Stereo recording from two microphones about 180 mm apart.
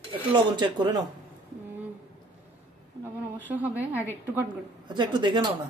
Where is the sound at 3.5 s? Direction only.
10° right (ahead or behind).